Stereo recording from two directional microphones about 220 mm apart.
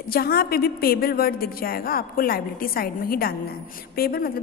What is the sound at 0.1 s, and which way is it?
A woman's voice, 45° left (ahead or behind).